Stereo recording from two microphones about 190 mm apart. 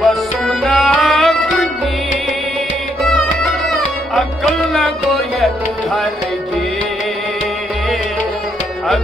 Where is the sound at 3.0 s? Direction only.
Centre (ahead or behind).